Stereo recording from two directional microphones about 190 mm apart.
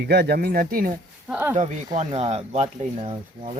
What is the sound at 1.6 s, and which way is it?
Speech, 40° right (ahead or behind).